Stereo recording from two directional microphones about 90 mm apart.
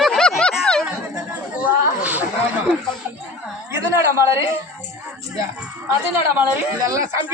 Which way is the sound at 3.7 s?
30° right (ahead or behind).